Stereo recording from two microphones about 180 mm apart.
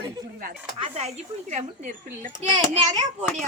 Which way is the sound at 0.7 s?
35° right (ahead or behind).